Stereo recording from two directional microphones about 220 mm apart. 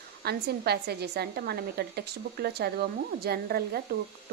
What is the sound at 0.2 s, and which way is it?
A woman's voice, 45° right (ahead or behind).